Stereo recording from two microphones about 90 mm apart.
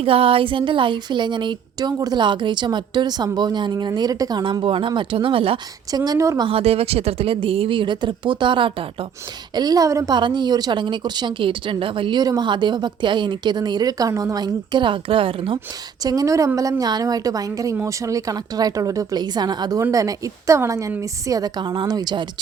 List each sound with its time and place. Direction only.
0.0 s a woman's voice: 90° right; by 1.9 s 60° right (ahead or behind)
2.0 s a woman's voice: 50° right (ahead or behind)
4.6 s speech: 75° right (ahead or behind)
6.1 s a woman's voice: 40° right (ahead or behind)
6.4 s speech: 90° right
9.6 s a woman's voice: 45° right (ahead or behind)
10.1 s a woman's voice: 60° right (ahead or behind)
12.2 s a woman's voice: 50° right (ahead or behind)
14.3 s speech: 55° right (ahead or behind); by 15.5 s 80° right
16.0 s a woman's voice: 40° right (ahead or behind)
19.8 s a woman's voice: 40° right (ahead or behind); by 22.3 s 55° right (ahead or behind)